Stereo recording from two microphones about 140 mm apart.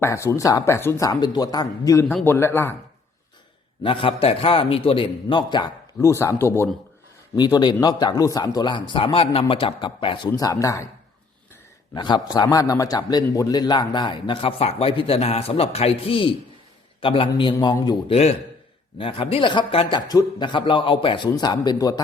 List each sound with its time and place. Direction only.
0.0 s speech: 20° left (ahead or behind)
3.8 s a man's voice: 40° left (ahead or behind)
6.0 s speech: 20° left (ahead or behind)
7.3 s a man's voice: 30° left (ahead or behind)
10.3 s speech: 25° left (ahead or behind)
11.9 s a man's voice: 30° left (ahead or behind)
18.1 s a man's voice: 45° left (ahead or behind); by 22.0 s 30° left (ahead or behind)